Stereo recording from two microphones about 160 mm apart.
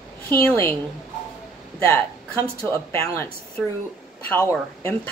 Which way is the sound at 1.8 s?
15° left (ahead or behind).